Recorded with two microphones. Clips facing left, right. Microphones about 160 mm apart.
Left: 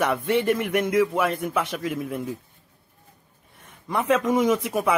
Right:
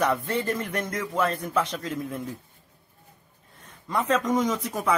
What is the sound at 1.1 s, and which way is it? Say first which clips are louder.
Speech: left 1 dB; 15° left (ahead or behind).